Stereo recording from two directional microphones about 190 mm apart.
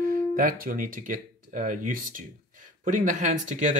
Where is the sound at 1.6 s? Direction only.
45° right (ahead or behind).